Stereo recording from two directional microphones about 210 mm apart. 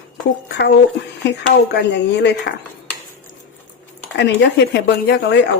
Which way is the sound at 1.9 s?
55° left (ahead or behind).